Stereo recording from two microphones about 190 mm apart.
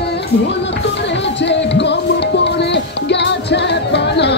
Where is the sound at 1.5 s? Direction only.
65° left (ahead or behind).